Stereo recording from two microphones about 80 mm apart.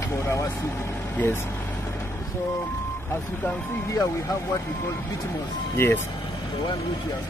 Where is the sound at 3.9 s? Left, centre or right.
Left.